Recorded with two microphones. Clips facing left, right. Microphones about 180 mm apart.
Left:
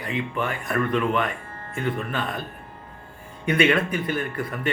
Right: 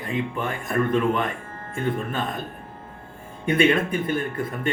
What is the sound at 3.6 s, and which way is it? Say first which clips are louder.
Speech: right 1 dB; 25° right (ahead or behind).